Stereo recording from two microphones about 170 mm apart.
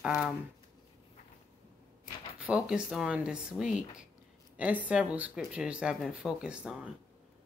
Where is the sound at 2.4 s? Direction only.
5° right (ahead or behind).